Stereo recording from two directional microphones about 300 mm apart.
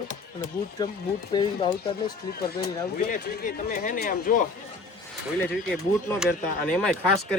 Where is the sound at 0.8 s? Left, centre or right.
Centre.